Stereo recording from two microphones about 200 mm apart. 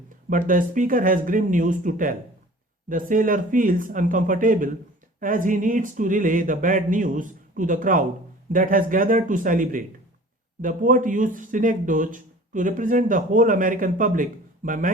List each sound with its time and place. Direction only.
0.3 s speech: 40° right (ahead or behind)